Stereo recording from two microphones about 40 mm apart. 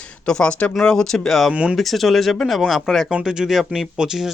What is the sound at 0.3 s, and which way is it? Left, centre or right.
Speech, left.